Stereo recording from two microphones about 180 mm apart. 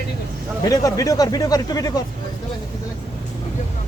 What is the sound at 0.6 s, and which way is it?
Speech, 20° left (ahead or behind).